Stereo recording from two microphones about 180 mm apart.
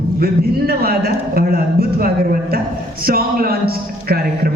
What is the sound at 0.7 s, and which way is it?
A man's voice, 60° right (ahead or behind).